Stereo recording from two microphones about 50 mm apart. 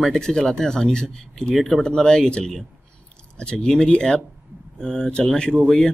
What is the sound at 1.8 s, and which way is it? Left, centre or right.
Speech, centre.